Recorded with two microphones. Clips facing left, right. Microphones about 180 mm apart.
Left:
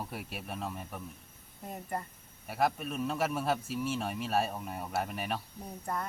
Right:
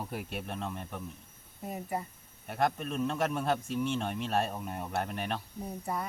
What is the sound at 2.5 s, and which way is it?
A man's voice, 5° left (ahead or behind).